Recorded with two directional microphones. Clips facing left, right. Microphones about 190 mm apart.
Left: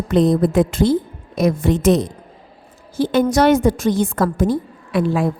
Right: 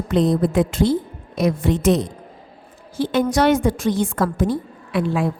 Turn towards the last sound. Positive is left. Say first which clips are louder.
# left 3 dB
turn(degrees=40)  # may be behind; listen again after turning